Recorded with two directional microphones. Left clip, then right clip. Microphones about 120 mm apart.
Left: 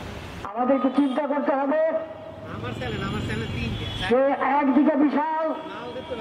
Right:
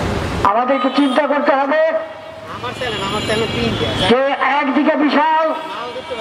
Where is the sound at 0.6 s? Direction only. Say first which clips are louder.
Right 7 dB; 20° right (ahead or behind).